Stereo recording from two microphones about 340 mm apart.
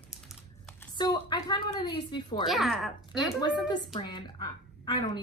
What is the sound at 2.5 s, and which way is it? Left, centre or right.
Speech, centre.